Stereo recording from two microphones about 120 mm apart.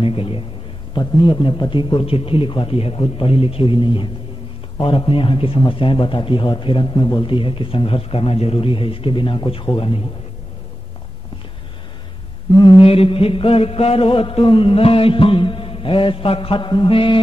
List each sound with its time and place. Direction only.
0.0 s a man's voice: 50° left (ahead or behind)
12.5 s a man's voice: 45° left (ahead or behind)